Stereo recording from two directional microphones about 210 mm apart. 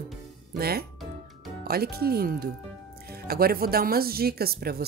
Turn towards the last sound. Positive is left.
turn(degrees=-45)  # may be behind; listen again after turning